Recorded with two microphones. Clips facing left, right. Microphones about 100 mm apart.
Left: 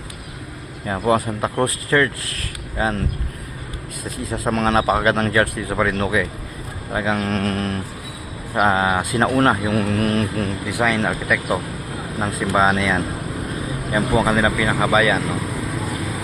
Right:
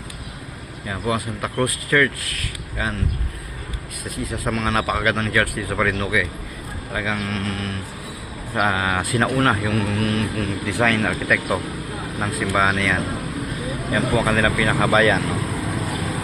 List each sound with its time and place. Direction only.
0.9 s speech: 35° left (ahead or behind)
4.0 s speech: 30° left (ahead or behind)
8.5 s speech: 20° left (ahead or behind)
9.5 s speech: 35° left (ahead or behind)
10.7 s speech: 15° left (ahead or behind)
12.2 s speech: 30° left (ahead or behind); by 15.4 s 5° left (ahead or behind)